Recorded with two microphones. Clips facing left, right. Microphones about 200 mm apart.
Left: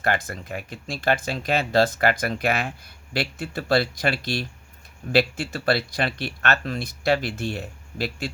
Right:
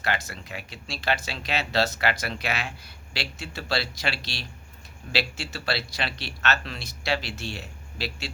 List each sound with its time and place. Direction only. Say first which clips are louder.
0.0 s speech: left 5 dB; 50° left (ahead or behind)